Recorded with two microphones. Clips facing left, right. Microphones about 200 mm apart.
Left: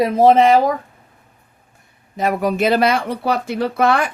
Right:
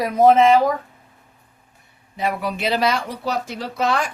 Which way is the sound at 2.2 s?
45° left (ahead or behind).